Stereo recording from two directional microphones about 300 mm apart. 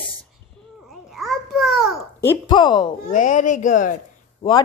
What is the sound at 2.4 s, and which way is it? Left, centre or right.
Speech, centre.